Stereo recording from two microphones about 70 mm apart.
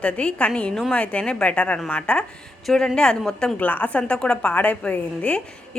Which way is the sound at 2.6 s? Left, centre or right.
Centre.